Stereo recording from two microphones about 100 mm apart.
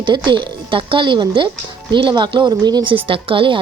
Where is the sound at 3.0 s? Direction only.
60° right (ahead or behind).